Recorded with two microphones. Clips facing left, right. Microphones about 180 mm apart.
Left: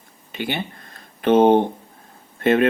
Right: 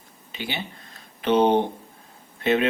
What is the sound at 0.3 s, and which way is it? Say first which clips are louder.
Speech: left 6 dB; 55° left (ahead or behind).